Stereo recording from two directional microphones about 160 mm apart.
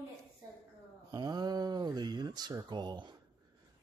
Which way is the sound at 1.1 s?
25° right (ahead or behind).